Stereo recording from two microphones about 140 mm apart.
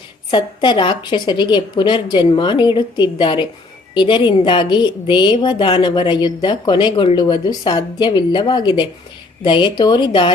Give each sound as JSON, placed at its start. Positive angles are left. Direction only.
{"t": 0.3, "sound": "a woman's voice", "side_deg": 35}